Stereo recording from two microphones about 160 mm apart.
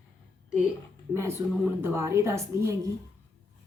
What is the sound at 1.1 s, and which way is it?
A woman's voice, 15° right (ahead or behind).